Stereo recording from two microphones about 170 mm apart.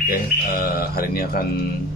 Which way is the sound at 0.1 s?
65° left (ahead or behind).